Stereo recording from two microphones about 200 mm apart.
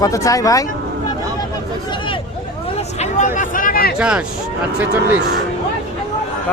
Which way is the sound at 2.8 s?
35° left (ahead or behind).